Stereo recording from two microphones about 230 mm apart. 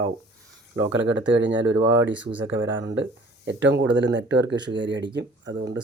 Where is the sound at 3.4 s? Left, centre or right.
Right.